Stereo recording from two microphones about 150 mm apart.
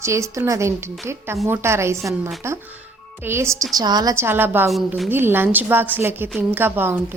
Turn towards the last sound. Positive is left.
turn(degrees=-15)  # may be behind; listen again after turning